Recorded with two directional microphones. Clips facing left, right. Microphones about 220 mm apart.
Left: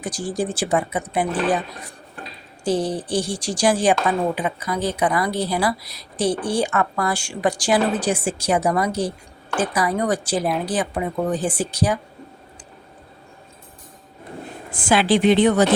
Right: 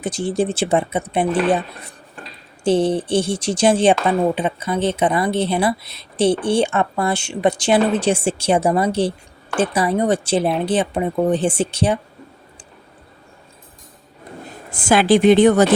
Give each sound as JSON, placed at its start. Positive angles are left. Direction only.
{"t": 0.0, "sound": "a woman's voice", "side_deg": -25}
{"t": 14.7, "sound": "a woman's voice", "side_deg": -40}